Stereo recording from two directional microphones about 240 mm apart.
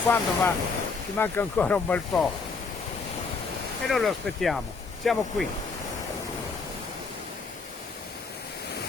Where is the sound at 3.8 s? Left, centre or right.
Centre.